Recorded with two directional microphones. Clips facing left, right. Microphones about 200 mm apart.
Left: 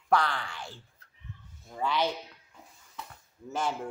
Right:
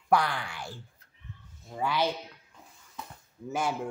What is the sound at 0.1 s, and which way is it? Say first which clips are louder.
Speech: right 1 dB; 10° right (ahead or behind).